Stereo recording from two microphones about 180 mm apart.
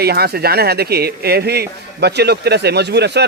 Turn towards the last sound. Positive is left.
turn(degrees=-70)  # may be behind; listen again after turning